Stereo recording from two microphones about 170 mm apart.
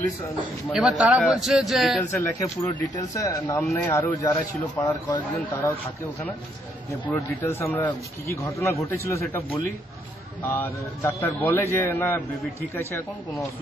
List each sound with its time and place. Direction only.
0.7 s a man's voice: 5° right (ahead or behind)
2.0 s a man's voice: 15° left (ahead or behind)
7.1 s speech: 15° left (ahead or behind)